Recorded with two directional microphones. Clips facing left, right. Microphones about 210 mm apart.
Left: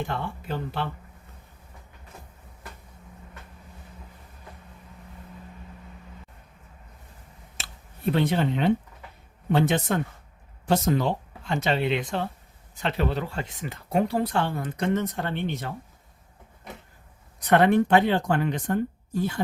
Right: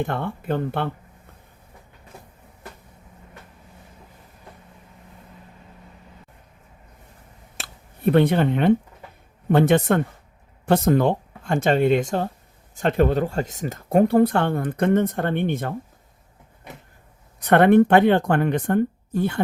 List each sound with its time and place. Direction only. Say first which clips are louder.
0.0 s speech: right 5 dB; 55° right (ahead or behind)
7.5 s a sound: right 4 dB; 55° right (ahead or behind)
9.5 s speech: right 6 dB; 55° right (ahead or behind)
17.4 s speech: right 5 dB; 55° right (ahead or behind)